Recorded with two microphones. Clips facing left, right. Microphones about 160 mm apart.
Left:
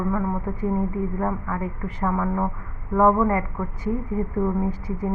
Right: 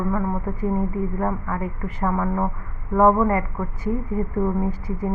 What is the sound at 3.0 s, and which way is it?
Speech, 20° right (ahead or behind).